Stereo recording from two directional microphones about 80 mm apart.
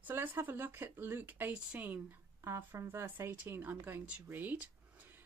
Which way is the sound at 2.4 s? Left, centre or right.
Right.